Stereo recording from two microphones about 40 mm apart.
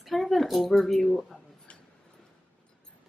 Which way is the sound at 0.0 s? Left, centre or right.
Centre.